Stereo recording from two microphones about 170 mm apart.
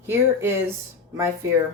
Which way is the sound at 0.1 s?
15° right (ahead or behind).